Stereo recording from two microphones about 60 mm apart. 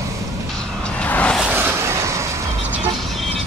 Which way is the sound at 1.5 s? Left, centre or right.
Right.